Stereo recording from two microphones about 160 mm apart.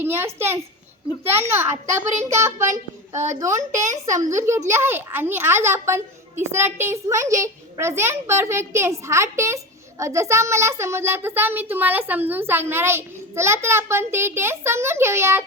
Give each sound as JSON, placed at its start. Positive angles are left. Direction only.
{"t": 0.0, "sound": "a sound", "side_deg": -15}
{"t": 0.3, "sound": "a child's voice", "side_deg": -15}
{"t": 3.1, "sound": "a child's voice", "side_deg": -45}
{"t": 4.0, "sound": "a child's voice", "side_deg": -20}